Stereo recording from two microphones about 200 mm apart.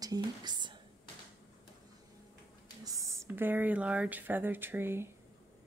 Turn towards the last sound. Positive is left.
turn(degrees=-10)  # may be behind; listen again after turning